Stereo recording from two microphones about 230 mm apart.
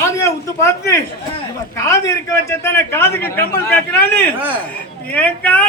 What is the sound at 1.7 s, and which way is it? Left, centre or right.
A man's voice, centre.